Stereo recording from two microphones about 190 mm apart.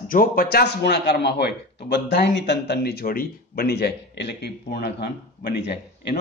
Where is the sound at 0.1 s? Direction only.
50° left (ahead or behind).